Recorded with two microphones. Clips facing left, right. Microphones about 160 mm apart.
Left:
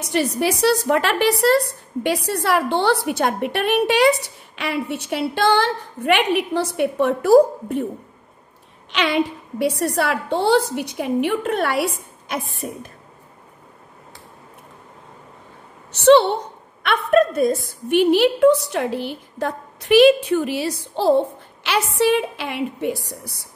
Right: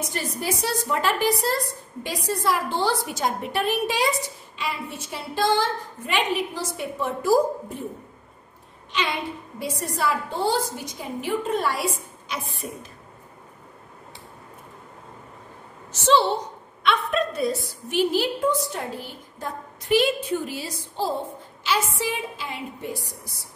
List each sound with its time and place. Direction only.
0.0 s a woman's voice: 75° left (ahead or behind)
8.9 s a woman's voice: 80° left
15.9 s a woman's voice: 65° left (ahead or behind); by 17.6 s 50° left (ahead or behind)
17.6 s a woman's voice: 60° left (ahead or behind)